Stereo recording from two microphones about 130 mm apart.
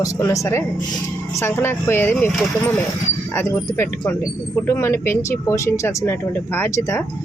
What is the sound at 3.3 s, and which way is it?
Speech, 20° left (ahead or behind).